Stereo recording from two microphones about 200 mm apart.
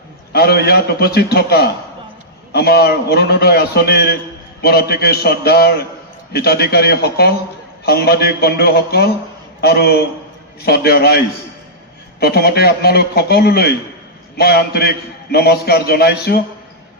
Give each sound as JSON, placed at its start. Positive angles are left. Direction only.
{"t": 0.3, "sound": "a man's voice", "side_deg": 55}
{"t": 12.2, "sound": "a man's voice", "side_deg": 50}